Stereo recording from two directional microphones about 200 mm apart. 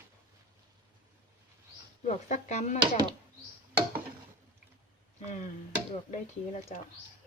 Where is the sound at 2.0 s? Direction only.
35° left (ahead or behind).